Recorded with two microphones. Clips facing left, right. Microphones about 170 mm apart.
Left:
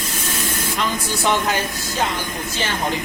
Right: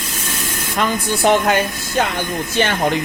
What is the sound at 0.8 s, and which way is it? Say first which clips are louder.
Speech: right 7 dB; 55° right (ahead or behind).